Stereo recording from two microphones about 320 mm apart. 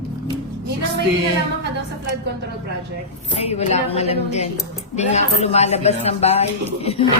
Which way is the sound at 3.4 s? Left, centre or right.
Centre.